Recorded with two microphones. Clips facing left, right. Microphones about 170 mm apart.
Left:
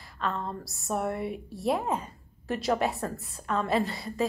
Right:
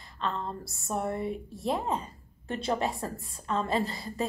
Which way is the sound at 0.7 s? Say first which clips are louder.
Left 2 dB; centre (ahead or behind).